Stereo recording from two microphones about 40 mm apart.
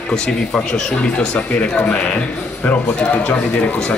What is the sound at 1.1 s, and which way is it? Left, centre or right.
Speech, left.